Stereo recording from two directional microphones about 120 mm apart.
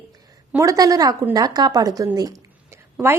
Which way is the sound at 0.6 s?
30° right (ahead or behind).